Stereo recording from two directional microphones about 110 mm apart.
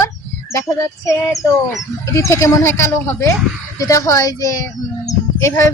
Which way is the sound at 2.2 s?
25° left (ahead or behind).